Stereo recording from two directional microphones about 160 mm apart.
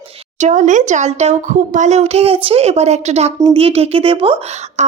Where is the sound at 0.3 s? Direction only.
50° right (ahead or behind).